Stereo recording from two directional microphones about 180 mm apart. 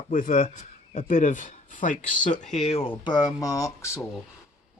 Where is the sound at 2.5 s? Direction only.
35° left (ahead or behind); by 4.0 s 15° left (ahead or behind).